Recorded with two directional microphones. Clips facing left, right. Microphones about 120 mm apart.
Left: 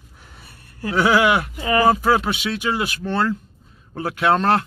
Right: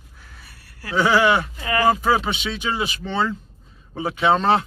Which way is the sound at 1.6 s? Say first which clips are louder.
Left 3 dB; 20° left (ahead or behind).